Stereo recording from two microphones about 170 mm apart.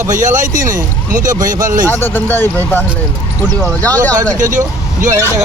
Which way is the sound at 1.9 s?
10° left (ahead or behind).